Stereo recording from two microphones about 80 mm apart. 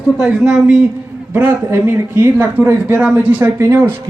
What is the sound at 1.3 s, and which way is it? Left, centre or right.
A man's voice, right.